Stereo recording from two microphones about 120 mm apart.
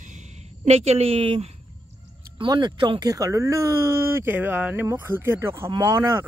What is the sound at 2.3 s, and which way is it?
Speech, 40° right (ahead or behind).